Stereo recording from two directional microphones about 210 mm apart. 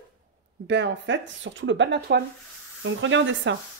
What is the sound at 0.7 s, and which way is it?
Speech, 55° right (ahead or behind).